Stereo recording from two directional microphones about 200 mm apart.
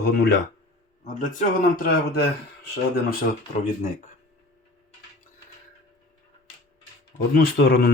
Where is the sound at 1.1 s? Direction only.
40° left (ahead or behind); by 3.2 s 55° left (ahead or behind).